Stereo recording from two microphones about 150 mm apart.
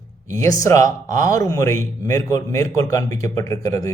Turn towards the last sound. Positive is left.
turn(degrees=20)  # may be behind; listen again after turning